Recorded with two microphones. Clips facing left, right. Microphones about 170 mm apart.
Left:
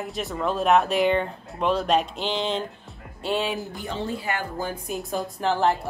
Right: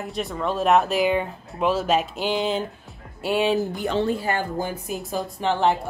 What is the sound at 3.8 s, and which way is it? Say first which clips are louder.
Speech: right 7 dB; 75° right (ahead or behind).